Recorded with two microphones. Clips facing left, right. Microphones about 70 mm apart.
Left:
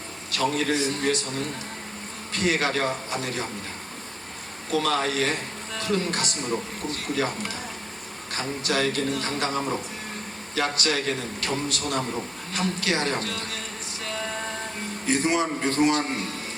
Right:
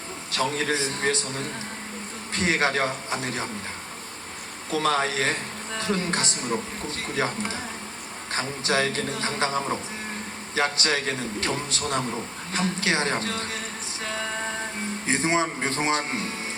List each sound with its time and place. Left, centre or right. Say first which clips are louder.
0.5 s speech: left 2 dB; right
4.7 s speech: even; right
15.0 s speech: left 1 dB; right